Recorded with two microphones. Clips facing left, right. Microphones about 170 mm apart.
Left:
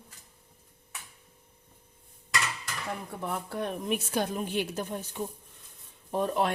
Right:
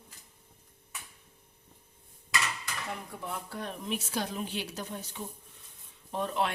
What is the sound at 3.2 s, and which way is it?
Speech, 55° left (ahead or behind).